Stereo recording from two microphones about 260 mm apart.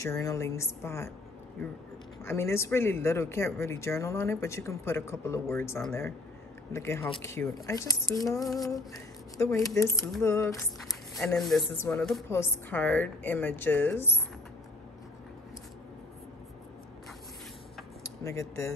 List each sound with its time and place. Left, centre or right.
0.0 s speech: centre
2.2 s speech: centre
9.4 s speech: centre
18.0 s dishes: centre